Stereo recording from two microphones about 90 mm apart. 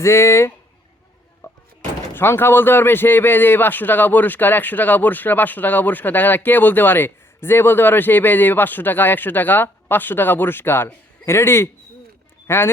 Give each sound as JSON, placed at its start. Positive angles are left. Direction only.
{"t": 0.0, "sound": "speech", "side_deg": 30}
{"t": 1.4, "sound": "a sound", "side_deg": 35}
{"t": 2.1, "sound": "a man's voice", "side_deg": 25}